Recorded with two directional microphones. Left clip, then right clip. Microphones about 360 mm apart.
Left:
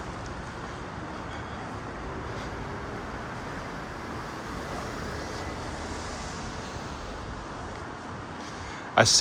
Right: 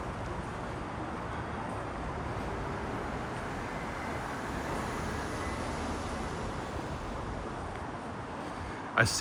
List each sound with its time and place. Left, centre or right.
9.0 s speech: centre